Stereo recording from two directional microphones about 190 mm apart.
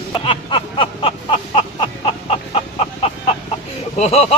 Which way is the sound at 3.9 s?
35° left (ahead or behind).